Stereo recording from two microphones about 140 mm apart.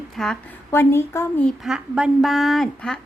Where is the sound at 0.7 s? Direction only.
15° left (ahead or behind).